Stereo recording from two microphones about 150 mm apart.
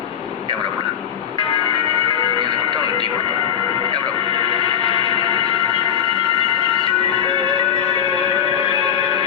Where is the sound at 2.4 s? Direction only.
35° right (ahead or behind).